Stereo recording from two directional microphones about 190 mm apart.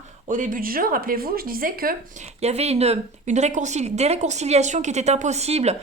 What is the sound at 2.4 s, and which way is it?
Speech, 35° right (ahead or behind).